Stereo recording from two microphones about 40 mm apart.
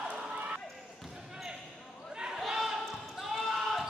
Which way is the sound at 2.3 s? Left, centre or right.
Centre.